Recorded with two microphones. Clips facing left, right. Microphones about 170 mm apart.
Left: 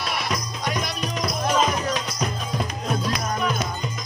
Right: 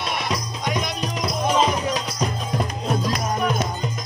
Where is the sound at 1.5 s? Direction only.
20° right (ahead or behind).